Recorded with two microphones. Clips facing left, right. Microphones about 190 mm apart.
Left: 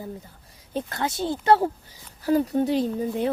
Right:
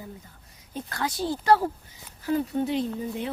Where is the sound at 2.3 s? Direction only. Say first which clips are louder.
Left 4 dB; 35° left (ahead or behind).